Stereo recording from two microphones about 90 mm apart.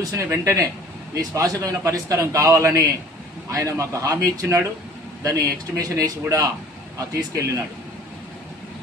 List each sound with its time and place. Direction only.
0.1 s a man's voice: 30° right (ahead or behind)